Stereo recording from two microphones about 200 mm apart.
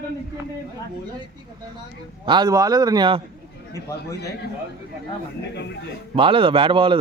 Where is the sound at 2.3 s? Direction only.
20° right (ahead or behind).